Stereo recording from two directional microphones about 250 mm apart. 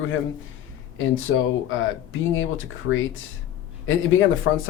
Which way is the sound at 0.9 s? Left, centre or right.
Left.